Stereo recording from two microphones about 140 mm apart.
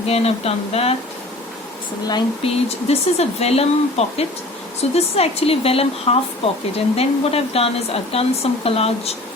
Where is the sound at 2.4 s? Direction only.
45° left (ahead or behind).